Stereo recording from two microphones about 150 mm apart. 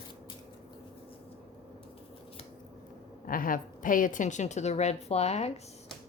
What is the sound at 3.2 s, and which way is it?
A woman's voice, 65° left (ahead or behind).